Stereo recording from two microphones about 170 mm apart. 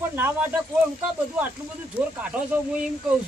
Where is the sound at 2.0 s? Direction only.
10° right (ahead or behind).